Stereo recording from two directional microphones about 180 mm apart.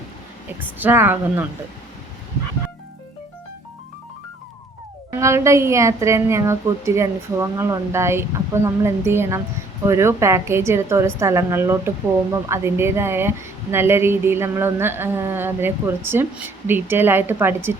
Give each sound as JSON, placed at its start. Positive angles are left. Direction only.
{"t": 0.8, "sound": "speech", "side_deg": -10}
{"t": 5.2, "sound": "speech", "side_deg": -15}